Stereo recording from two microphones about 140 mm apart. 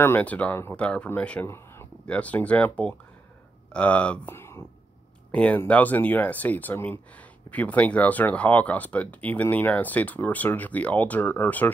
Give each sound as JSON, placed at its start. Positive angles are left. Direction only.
{"t": 0.0, "sound": "speech", "side_deg": 15}